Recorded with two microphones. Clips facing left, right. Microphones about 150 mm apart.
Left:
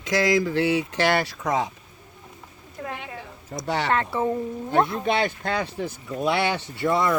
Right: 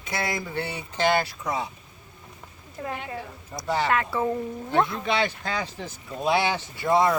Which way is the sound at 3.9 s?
30° left (ahead or behind).